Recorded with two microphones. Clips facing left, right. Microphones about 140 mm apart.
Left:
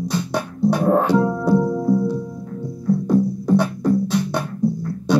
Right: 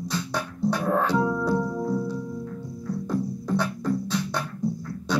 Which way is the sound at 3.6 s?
20° left (ahead or behind).